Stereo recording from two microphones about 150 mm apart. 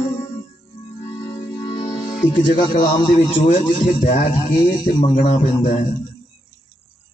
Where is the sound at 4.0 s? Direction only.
65° left (ahead or behind).